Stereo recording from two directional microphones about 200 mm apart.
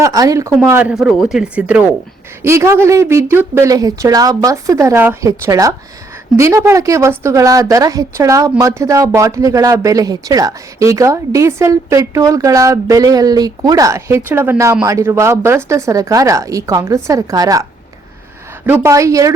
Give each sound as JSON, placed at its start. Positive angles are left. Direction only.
{"t": 0.0, "sound": "a woman's voice", "side_deg": -15}